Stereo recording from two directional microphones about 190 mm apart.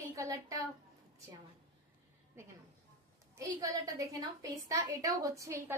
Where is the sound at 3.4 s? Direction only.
20° right (ahead or behind).